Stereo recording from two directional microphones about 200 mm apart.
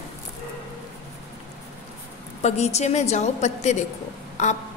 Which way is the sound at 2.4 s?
35° left (ahead or behind).